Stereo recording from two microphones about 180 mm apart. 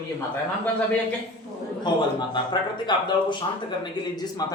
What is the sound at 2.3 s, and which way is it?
Speech, 25° left (ahead or behind).